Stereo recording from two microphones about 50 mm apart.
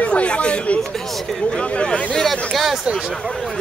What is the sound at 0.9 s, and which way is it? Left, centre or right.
Speech, centre.